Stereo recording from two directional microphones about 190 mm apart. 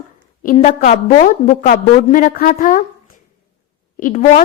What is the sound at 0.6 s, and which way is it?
A woman's voice, 35° left (ahead or behind).